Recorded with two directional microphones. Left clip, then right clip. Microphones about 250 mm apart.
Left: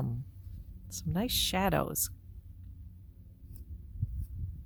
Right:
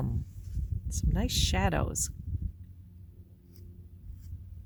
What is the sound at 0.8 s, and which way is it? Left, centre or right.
Speech, centre.